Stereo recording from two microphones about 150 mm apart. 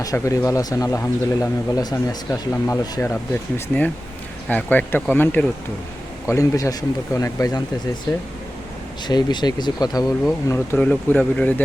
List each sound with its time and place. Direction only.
0.0 s speech: 20° left (ahead or behind)
4.4 s speech: 10° left (ahead or behind)
9.0 s speech: 30° left (ahead or behind)
10.8 s speech: 10° left (ahead or behind)